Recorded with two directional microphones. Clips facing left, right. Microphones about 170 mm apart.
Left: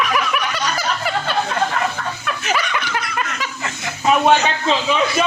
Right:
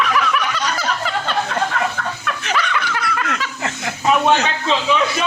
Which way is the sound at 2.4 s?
10° left (ahead or behind).